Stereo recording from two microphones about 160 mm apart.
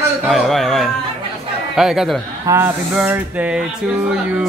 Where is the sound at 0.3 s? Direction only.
Centre (ahead or behind).